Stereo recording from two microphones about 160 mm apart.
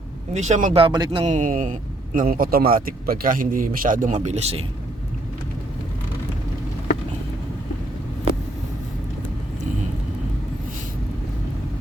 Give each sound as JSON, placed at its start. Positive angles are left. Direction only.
{"t": 0.3, "sound": "speech", "side_deg": -50}
{"t": 0.8, "sound": "speech", "side_deg": -30}
{"t": 1.2, "sound": "speech", "side_deg": -50}